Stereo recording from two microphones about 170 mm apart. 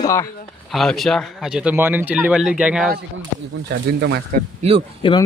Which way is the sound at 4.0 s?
75° right (ahead or behind).